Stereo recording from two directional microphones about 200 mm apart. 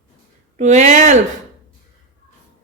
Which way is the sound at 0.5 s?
35° right (ahead or behind).